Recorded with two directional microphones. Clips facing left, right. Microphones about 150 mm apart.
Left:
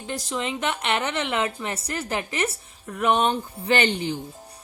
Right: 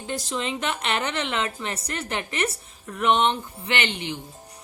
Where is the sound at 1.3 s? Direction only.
25° left (ahead or behind).